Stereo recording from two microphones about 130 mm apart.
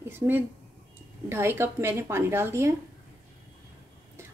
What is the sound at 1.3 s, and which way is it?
A woman's voice, 20° right (ahead or behind).